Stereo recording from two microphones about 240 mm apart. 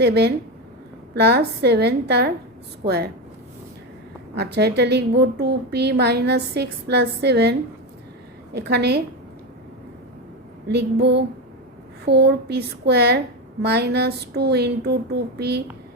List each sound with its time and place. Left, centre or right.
0.0 s a woman's voice: right
4.4 s a woman's voice: right
8.5 s a woman's voice: right
10.7 s a woman's voice: right